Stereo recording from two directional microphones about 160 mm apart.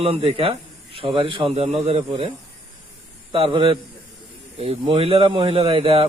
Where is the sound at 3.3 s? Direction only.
35° right (ahead or behind).